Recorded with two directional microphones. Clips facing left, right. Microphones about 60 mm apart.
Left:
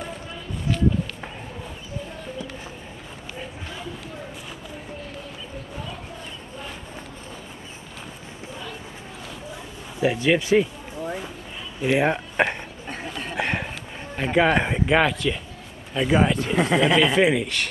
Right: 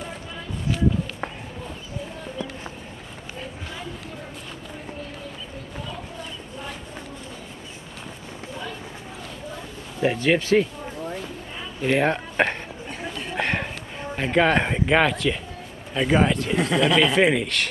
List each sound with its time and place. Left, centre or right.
9.9 s a sound: centre
11.8 s speech: centre
13.4 s a sound: centre
14.1 s speech: centre
16.7 s speech: centre
17.0 s speech: centre